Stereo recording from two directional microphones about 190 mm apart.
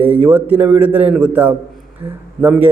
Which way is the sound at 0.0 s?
10° right (ahead or behind).